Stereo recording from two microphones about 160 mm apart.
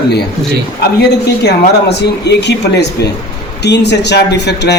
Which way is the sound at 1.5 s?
90° left.